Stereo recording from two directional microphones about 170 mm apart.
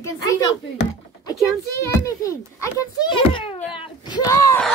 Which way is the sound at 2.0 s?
20° left (ahead or behind).